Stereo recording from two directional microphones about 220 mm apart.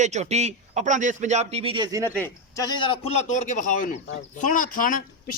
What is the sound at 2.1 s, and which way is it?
A man's voice, 10° left (ahead or behind).